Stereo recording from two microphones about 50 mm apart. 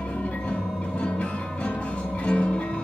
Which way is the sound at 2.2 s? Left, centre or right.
Left.